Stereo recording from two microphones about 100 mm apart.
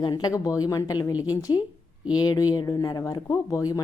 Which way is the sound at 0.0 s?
40° left (ahead or behind).